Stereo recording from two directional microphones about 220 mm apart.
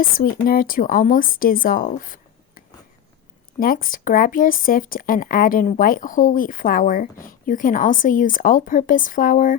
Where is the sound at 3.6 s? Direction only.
40° left (ahead or behind).